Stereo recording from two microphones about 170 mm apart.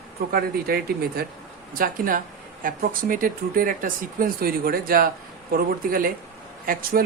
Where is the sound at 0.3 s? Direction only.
65° right (ahead or behind).